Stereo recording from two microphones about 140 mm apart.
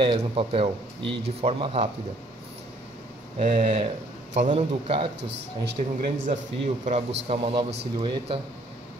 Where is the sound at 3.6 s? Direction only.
45° right (ahead or behind).